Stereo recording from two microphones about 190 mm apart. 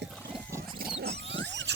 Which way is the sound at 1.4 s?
65° right (ahead or behind).